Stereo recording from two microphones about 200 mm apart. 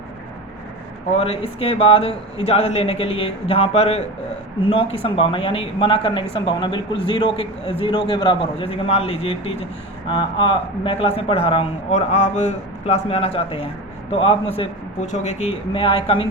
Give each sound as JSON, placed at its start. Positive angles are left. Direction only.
{"t": 1.1, "sound": "speech", "side_deg": 30}
{"t": 5.0, "sound": "speech", "side_deg": 25}